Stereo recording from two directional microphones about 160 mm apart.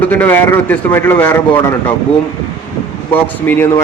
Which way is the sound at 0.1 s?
10° left (ahead or behind).